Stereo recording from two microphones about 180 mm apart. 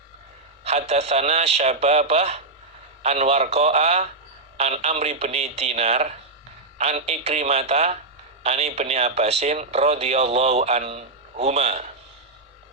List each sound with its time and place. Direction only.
0.6 s speech: 35° right (ahead or behind)